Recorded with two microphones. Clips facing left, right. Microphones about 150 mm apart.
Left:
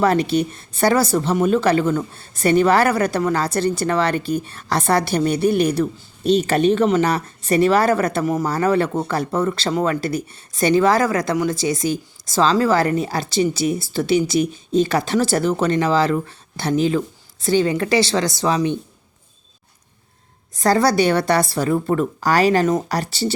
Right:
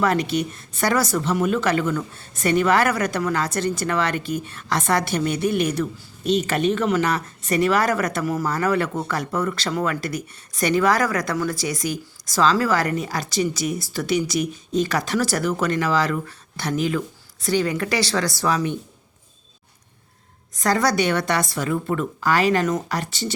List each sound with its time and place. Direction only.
0.0 s speech: 30° left (ahead or behind)
20.6 s speech: 30° left (ahead or behind)